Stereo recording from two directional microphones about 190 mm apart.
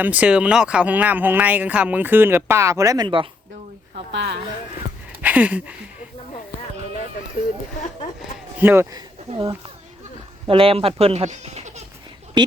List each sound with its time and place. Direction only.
0.0 s speech: 10° right (ahead or behind); by 3.2 s 25° right (ahead or behind)
4.1 s speech: 65° right (ahead or behind)
5.2 s a sound: 10° right (ahead or behind)
8.5 s speech: 10° right (ahead or behind); by 11.8 s 35° right (ahead or behind)